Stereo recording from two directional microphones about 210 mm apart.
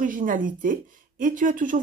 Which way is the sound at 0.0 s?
40° right (ahead or behind).